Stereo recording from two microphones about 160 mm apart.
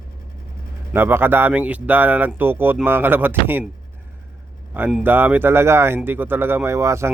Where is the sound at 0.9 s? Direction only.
15° right (ahead or behind).